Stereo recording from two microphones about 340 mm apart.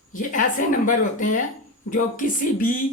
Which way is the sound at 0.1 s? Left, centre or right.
Left.